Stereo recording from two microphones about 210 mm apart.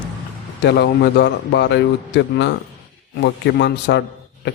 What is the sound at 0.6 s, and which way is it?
A man's voice, 55° left (ahead or behind).